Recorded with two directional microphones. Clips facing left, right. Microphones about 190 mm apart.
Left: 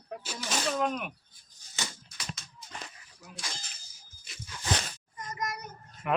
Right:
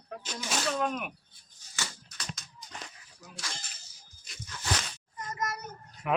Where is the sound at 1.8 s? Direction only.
20° left (ahead or behind).